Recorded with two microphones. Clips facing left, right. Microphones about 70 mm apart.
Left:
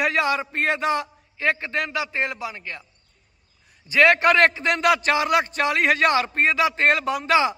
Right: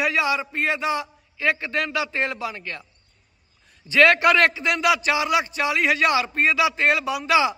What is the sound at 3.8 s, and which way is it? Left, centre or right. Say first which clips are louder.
A man's voice: even; left.